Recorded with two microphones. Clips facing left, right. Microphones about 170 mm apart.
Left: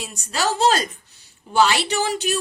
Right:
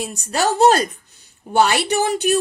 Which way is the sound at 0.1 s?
50° right (ahead or behind).